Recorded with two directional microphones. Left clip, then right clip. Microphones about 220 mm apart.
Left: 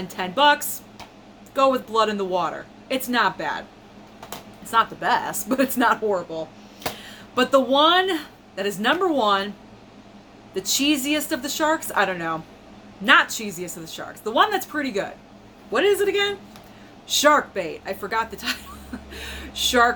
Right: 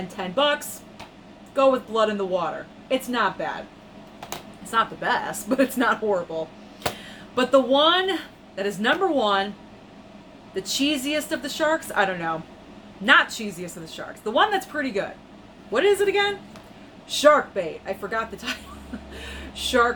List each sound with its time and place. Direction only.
0.2 s a woman's voice: 15° left (ahead or behind)
1.5 s a woman's voice: 15° left (ahead or behind)
4.6 s a woman's voice: 15° left (ahead or behind)
10.7 s a woman's voice: 15° left (ahead or behind)